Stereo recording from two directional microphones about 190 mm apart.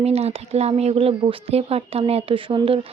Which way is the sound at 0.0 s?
35° right (ahead or behind).